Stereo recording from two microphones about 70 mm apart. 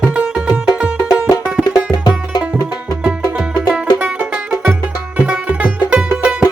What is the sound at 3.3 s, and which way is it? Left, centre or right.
Music, centre.